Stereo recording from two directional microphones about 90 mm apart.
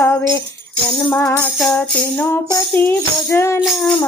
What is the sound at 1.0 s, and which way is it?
Music, 25° left (ahead or behind).